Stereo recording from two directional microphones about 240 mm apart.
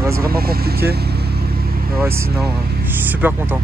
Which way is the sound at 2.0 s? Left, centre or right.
Centre.